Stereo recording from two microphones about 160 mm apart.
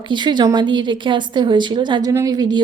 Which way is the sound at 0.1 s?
30° right (ahead or behind).